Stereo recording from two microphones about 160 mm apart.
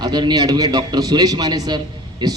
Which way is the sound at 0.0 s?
25° right (ahead or behind).